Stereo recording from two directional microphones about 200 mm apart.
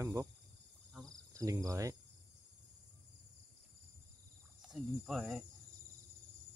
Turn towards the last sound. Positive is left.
turn(degrees=0)  # may be behind; listen again after turning